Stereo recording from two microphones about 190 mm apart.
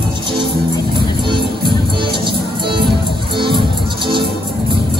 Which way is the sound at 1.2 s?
25° right (ahead or behind).